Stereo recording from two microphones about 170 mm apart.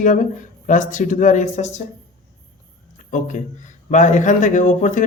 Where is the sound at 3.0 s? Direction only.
50° left (ahead or behind).